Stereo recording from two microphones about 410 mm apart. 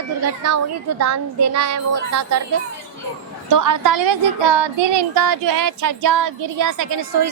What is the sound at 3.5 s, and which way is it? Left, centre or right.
A woman's voice, right.